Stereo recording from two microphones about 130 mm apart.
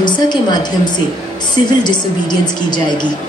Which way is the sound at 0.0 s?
35° left (ahead or behind).